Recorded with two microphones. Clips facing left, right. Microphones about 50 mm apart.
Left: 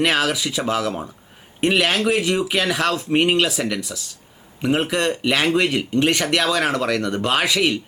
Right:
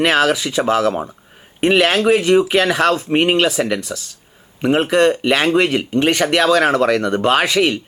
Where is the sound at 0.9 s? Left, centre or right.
Right.